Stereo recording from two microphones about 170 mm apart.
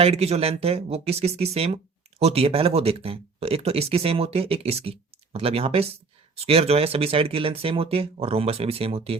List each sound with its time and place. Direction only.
0.0 s speech: 35° right (ahead or behind)